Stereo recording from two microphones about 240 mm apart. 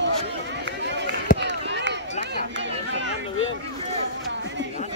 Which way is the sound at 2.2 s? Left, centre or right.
Right.